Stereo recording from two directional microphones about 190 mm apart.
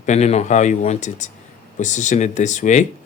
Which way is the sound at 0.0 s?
35° left (ahead or behind).